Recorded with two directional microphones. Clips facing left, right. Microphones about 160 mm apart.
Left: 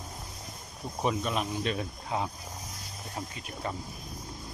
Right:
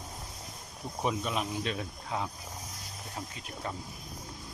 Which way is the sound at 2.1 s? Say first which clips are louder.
Left 3 dB; 20° left (ahead or behind).